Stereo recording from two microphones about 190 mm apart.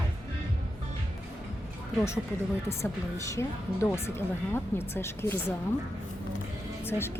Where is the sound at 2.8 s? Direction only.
15° left (ahead or behind).